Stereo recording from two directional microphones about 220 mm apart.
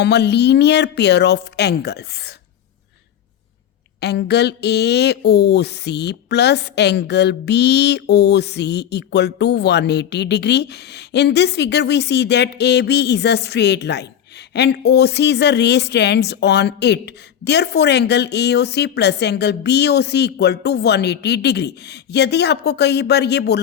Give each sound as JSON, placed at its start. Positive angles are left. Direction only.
{"t": 0.0, "sound": "speech", "side_deg": 50}
{"t": 4.0, "sound": "speech", "side_deg": 50}